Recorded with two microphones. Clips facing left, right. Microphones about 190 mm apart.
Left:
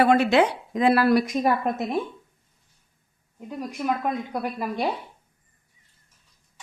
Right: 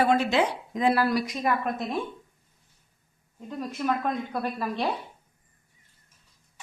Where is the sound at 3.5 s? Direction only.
10° left (ahead or behind).